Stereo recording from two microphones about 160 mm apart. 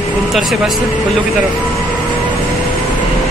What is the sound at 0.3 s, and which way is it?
Speech, centre (ahead or behind).